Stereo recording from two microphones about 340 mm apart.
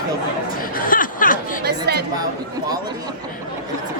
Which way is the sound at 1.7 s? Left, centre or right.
Right.